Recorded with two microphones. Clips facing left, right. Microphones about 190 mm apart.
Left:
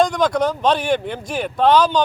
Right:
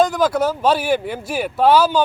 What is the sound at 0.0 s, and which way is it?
Speech, 5° right (ahead or behind).